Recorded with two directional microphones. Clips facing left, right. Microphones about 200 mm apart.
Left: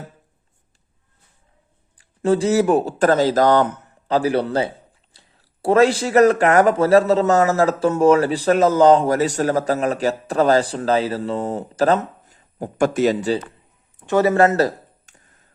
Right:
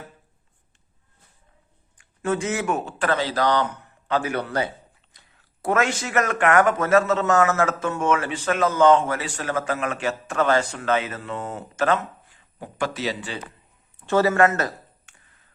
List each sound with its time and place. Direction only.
2.0 s speech: 30° left (ahead or behind)
14.0 s speech: 15° left (ahead or behind)
14.3 s a sound: 35° left (ahead or behind)